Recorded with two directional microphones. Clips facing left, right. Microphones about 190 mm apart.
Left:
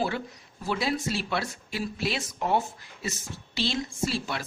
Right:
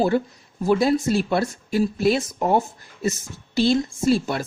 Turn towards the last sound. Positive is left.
turn(degrees=-45)  # may be behind; listen again after turning